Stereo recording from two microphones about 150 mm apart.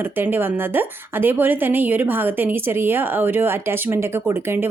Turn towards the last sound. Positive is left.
turn(degrees=-15)  # may be behind; listen again after turning